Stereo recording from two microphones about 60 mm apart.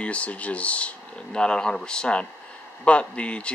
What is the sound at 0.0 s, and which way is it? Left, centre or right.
Speech, left.